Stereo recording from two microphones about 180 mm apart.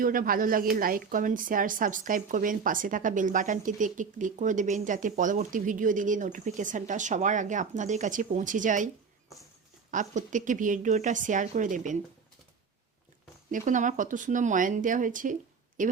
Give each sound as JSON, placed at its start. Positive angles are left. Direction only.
{"t": 0.0, "sound": "speech", "side_deg": -50}
{"t": 9.9, "sound": "speech", "side_deg": -45}
{"t": 13.5, "sound": "speech", "side_deg": -45}